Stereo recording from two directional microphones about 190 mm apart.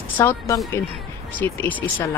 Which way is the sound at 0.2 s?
10° left (ahead or behind).